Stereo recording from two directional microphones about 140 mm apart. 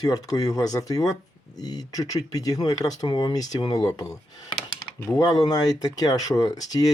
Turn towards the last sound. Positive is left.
turn(degrees=25)  # may be behind; listen again after turning